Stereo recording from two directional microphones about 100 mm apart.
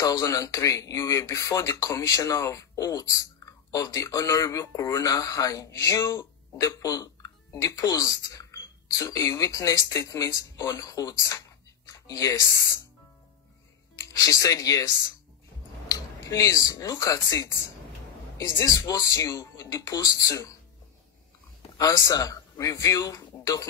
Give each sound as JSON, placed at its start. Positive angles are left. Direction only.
{"t": 0.0, "sound": "speech", "side_deg": 35}
{"t": 13.9, "sound": "speech", "side_deg": 35}
{"t": 15.9, "sound": "speech", "side_deg": 35}
{"t": 21.7, "sound": "a man's voice", "side_deg": 35}